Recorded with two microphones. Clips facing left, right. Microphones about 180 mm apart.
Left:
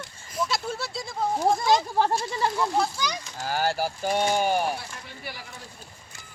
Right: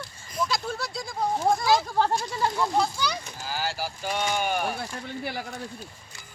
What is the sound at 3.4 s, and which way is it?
Speech, 55° left (ahead or behind).